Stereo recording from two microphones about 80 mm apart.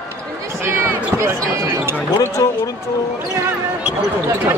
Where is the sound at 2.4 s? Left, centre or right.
Left.